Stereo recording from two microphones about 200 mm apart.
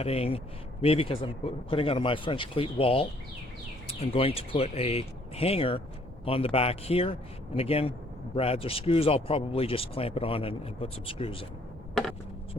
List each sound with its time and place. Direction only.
0.0 s speech: 30° left (ahead or behind)